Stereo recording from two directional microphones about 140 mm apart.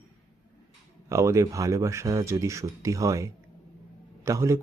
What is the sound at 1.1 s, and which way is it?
Speech, 20° right (ahead or behind).